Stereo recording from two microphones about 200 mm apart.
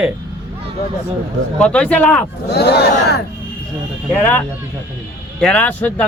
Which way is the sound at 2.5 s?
55° left (ahead or behind).